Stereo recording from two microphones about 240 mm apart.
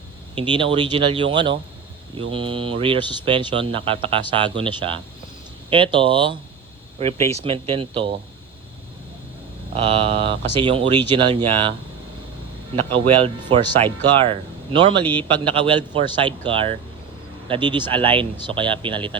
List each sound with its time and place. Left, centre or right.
0.3 s speech: centre
9.7 s speech: right
12.7 s speech: right